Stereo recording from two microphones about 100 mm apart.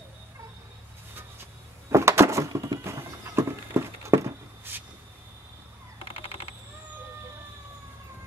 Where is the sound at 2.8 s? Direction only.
25° right (ahead or behind).